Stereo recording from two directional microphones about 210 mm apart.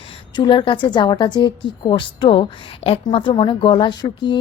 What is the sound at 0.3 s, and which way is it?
A woman's voice, 25° left (ahead or behind).